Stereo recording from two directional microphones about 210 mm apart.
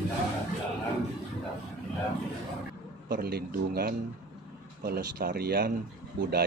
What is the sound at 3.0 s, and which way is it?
Speech, 50° right (ahead or behind).